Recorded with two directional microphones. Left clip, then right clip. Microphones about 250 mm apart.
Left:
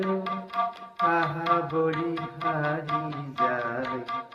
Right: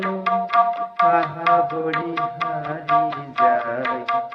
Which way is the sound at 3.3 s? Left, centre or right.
Right.